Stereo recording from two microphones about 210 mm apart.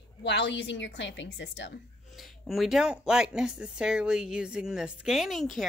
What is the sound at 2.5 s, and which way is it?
Speech, centre (ahead or behind).